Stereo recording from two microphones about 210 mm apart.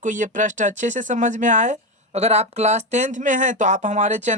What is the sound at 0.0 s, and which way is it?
A woman's voice, 35° right (ahead or behind).